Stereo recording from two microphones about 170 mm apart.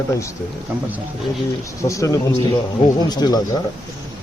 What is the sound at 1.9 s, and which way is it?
Speech, 20° left (ahead or behind).